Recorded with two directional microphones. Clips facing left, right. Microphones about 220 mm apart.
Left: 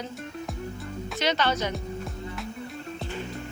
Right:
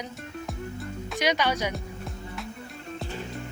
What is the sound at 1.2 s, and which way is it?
Speech, 10° right (ahead or behind).